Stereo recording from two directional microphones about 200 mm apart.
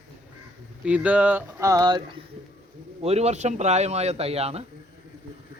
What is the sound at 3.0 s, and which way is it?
Speech, 30° right (ahead or behind).